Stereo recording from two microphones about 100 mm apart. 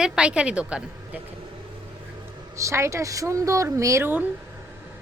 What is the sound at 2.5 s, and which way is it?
A woman's voice, 30° right (ahead or behind).